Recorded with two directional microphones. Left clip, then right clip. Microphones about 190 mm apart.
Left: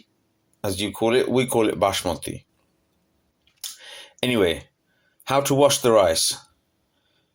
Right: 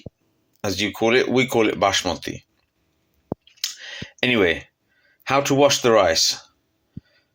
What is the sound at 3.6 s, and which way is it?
Clicking, 10° left (ahead or behind).